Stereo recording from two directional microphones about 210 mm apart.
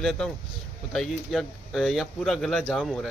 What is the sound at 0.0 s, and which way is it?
Speech, centre (ahead or behind).